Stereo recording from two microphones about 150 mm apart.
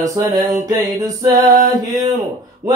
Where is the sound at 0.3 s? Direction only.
25° right (ahead or behind).